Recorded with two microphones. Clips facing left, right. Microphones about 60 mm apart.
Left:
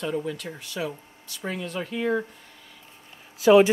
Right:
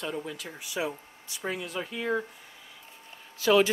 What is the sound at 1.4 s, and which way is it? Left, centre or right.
Speech, centre.